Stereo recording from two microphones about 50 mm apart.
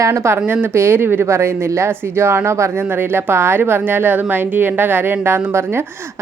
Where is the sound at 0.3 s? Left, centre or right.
Right.